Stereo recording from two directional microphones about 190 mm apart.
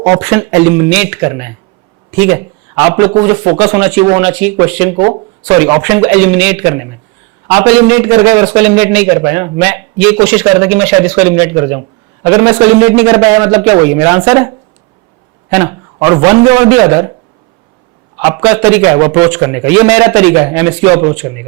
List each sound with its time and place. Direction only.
0.0 s a man's voice: 20° right (ahead or behind)
4.2 s a man's voice: 10° right (ahead or behind)
4.9 s a man's voice: 30° right (ahead or behind)
5.5 s a man's voice: 20° right (ahead or behind)
15.5 s a man's voice: 20° right (ahead or behind)
18.2 s a man's voice: 15° right (ahead or behind)